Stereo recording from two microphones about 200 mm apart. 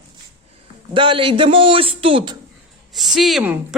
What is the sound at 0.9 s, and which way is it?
Speech, 25° right (ahead or behind).